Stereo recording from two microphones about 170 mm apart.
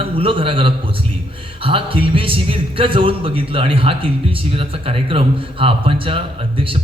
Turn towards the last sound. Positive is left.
turn(degrees=-35)  # may be behind; listen again after turning